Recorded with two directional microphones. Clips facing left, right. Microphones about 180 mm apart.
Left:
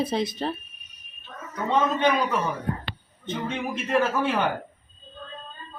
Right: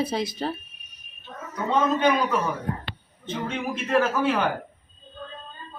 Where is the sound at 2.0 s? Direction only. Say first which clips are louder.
Right 1 dB; centre (ahead or behind).